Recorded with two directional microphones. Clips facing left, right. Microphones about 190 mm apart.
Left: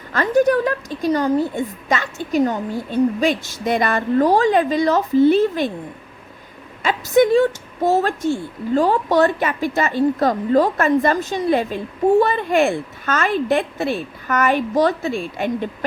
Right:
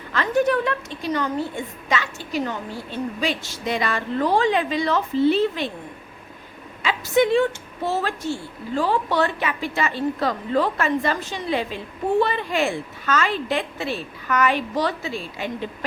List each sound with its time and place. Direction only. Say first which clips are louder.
0.1 s a woman's voice: left 4 dB; 40° left (ahead or behind)
6.8 s a woman's voice: left 4 dB; 45° left (ahead or behind)